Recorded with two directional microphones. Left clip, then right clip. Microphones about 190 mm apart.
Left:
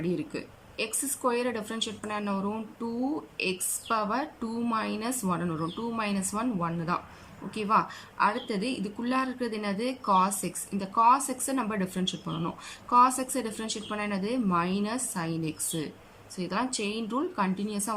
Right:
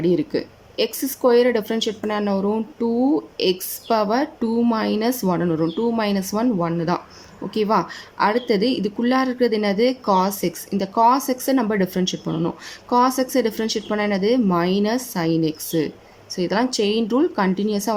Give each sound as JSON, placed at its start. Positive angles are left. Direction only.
{"t": 0.0, "sound": "speech", "side_deg": -35}